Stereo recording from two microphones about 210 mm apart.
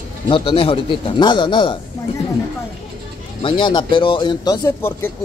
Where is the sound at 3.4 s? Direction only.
20° left (ahead or behind).